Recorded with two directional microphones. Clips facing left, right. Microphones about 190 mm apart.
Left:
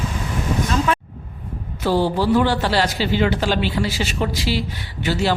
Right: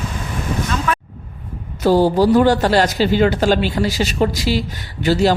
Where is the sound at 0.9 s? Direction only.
25° left (ahead or behind).